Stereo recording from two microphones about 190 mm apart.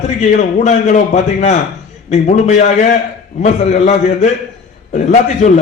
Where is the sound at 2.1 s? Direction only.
35° left (ahead or behind).